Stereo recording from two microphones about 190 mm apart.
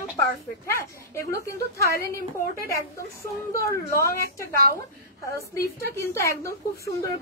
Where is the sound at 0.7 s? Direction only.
15° left (ahead or behind).